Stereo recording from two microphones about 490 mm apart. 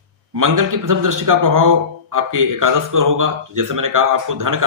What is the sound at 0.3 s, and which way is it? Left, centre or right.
A man's voice, right.